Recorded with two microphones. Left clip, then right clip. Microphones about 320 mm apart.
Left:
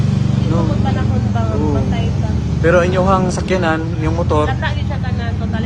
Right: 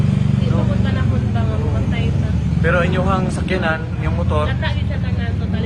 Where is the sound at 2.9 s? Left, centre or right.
Left.